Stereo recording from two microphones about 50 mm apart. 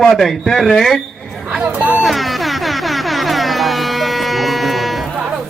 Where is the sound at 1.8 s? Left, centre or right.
Right.